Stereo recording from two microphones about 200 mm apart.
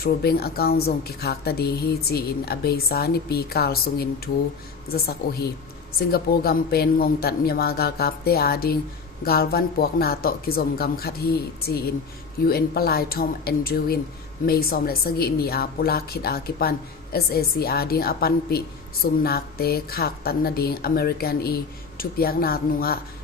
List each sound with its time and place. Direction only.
0.0 s a woman's voice: 50° left (ahead or behind)
12.5 s a woman's voice: 50° left (ahead or behind)